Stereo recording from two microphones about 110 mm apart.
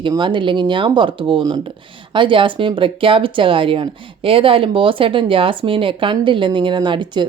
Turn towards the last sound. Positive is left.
turn(degrees=-45)  # may be behind; listen again after turning